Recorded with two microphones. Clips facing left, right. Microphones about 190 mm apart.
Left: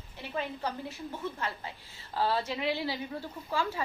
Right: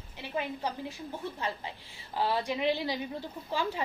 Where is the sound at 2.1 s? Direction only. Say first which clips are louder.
Even; 15° right (ahead or behind).